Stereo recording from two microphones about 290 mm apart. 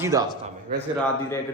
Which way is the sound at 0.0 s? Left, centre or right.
Centre.